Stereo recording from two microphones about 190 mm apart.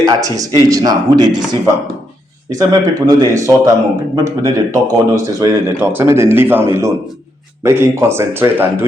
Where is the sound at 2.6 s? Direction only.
15° right (ahead or behind).